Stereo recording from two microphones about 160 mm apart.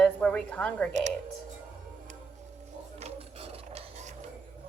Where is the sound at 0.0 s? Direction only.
5° left (ahead or behind).